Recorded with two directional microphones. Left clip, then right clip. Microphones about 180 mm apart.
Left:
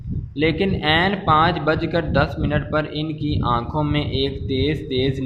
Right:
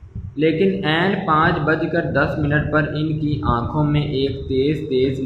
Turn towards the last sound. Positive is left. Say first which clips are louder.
# right 3 dB
turn(degrees=45)  # may be behind; listen again after turning